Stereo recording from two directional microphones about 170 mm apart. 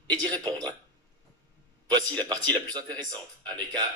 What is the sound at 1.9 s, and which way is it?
A man's voice, 25° right (ahead or behind).